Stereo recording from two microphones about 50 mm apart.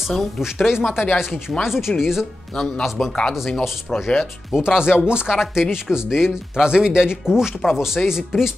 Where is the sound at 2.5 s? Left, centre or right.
Centre.